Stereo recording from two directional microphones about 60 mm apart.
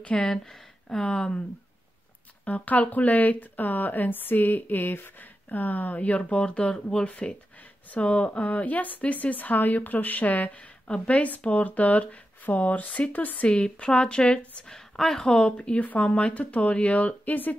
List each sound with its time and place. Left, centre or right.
0.0 s speech: centre
2.4 s speech: left
13.5 s speech: centre